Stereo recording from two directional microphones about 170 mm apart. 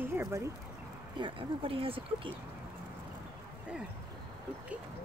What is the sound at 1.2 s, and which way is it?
Speech, 30° right (ahead or behind).